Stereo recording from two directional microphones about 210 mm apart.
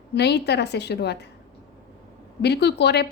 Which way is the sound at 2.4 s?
50° left (ahead or behind).